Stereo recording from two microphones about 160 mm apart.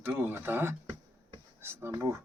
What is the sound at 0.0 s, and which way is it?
Speech, 10° right (ahead or behind).